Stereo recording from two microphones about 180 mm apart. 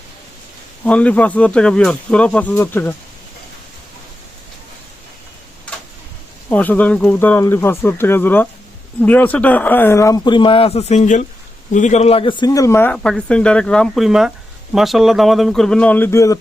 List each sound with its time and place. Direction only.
0.9 s speech: 5° left (ahead or behind)
6.5 s speech: 10° left (ahead or behind)